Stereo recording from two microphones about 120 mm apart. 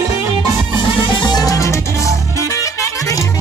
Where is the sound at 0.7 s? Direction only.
35° left (ahead or behind).